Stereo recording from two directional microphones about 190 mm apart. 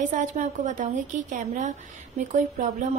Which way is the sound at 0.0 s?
40° right (ahead or behind).